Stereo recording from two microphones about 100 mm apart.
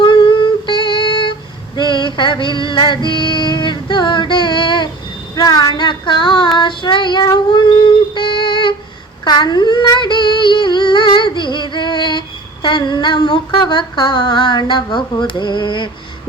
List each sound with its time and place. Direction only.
0.0 s humming: 55° left (ahead or behind)
5.3 s female singing: 40° left (ahead or behind)
6.6 s child singing: 55° left (ahead or behind)
7.3 s humming: 50° left (ahead or behind)
9.2 s a sound: 45° left (ahead or behind)
12.6 s humming: 50° left (ahead or behind)